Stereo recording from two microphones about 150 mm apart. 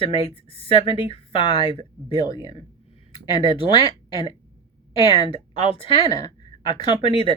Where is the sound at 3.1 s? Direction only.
35° left (ahead or behind).